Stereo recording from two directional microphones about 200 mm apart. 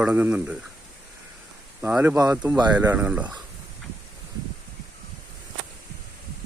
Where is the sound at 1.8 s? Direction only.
5° right (ahead or behind).